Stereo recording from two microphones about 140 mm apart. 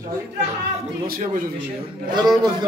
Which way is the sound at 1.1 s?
85° right.